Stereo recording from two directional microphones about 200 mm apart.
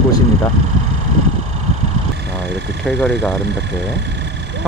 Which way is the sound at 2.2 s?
55° right (ahead or behind).